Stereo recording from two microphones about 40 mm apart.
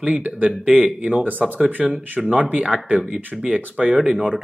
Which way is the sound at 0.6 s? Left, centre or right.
Right.